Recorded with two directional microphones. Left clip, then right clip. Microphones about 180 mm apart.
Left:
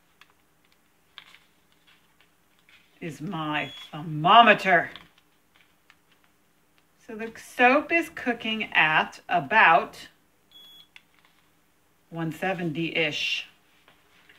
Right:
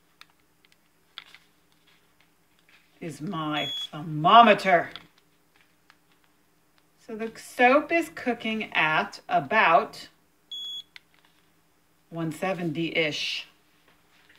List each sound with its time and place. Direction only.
3.0 s speech: 15° right (ahead or behind)
7.1 s speech: 15° right (ahead or behind)
12.1 s speech: 20° right (ahead or behind)